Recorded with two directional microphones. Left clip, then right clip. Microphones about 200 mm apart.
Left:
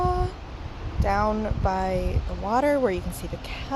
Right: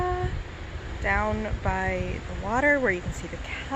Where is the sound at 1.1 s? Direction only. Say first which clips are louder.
Left 2 dB; 20° left (ahead or behind).